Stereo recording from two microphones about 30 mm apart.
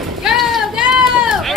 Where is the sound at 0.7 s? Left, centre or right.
Centre.